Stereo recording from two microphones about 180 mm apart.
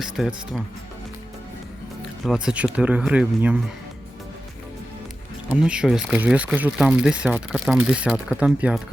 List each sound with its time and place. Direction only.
0.0 s speech: centre (ahead or behind)
2.2 s speech: 5° right (ahead or behind)
5.5 s speech: 5° right (ahead or behind)